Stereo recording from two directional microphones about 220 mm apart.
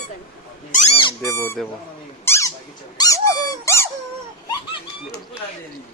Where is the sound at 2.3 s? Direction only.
15° left (ahead or behind).